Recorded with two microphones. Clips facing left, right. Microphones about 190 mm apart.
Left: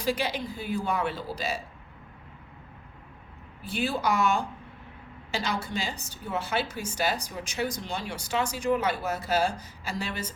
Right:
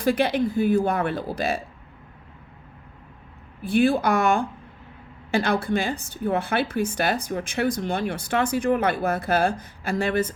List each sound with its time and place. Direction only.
0.0 s a woman's voice: 55° right (ahead or behind)
3.6 s a woman's voice: 55° right (ahead or behind)